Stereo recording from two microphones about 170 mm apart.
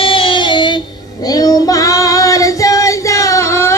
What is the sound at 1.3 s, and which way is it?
Child singing, 20° left (ahead or behind).